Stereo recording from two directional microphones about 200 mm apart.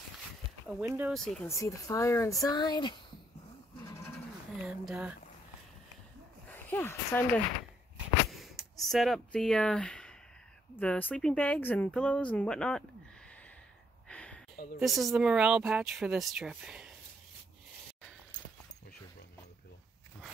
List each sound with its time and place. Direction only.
0.8 s speech: 10° right (ahead or behind)
1.1 s speech: 5° left (ahead or behind)
1.5 s speech: 15° left (ahead or behind)
4.6 s speech: 5° right (ahead or behind)
6.5 s speech: 10° left (ahead or behind)
8.3 s speech: centre (ahead or behind)
14.0 s a sound: 5° left (ahead or behind)
14.8 s speech: centre (ahead or behind)